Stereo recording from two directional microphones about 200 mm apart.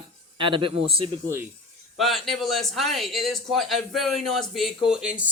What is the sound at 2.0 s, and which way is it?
A man's voice, centre (ahead or behind).